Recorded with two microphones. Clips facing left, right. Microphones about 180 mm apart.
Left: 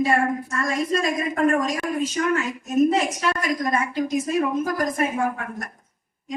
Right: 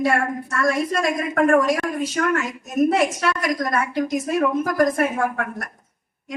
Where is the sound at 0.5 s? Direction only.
70° right (ahead or behind).